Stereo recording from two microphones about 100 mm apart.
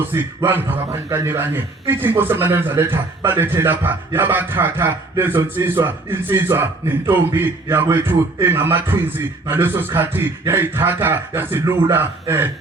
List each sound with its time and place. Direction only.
0.1 s a man's voice: 20° right (ahead or behind)